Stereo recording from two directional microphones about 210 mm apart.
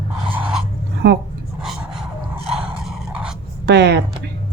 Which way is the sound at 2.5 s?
5° right (ahead or behind).